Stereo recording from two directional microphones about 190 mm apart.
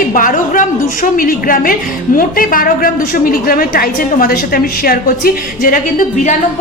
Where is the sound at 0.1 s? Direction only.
45° left (ahead or behind).